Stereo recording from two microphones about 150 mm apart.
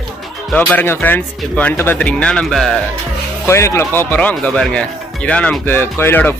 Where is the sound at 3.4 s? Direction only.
15° left (ahead or behind).